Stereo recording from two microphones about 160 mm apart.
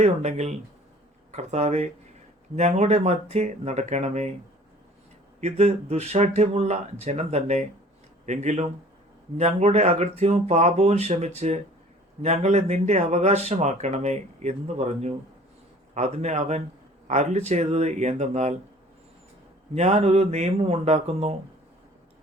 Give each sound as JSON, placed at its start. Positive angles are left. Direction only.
{"t": 0.0, "sound": "speech", "side_deg": -45}
{"t": 5.4, "sound": "speech", "side_deg": -40}
{"t": 19.7, "sound": "speech", "side_deg": -45}